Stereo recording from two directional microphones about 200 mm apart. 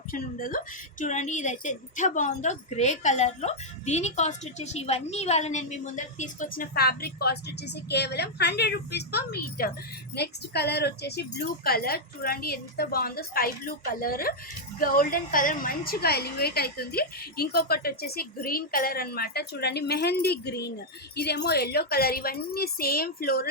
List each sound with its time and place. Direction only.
0.1 s a woman's voice: 45° left (ahead or behind)